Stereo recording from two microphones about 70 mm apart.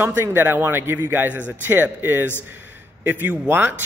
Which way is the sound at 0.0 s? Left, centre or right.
Right.